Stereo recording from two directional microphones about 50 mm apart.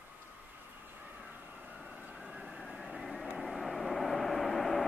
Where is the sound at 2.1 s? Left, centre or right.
Centre.